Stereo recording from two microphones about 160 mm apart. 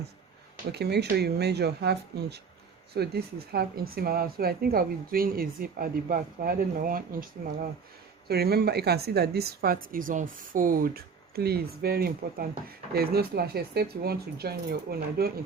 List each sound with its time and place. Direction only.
0.7 s speech: 90° right; by 7.3 s 65° right (ahead or behind)
8.3 s speech: 80° right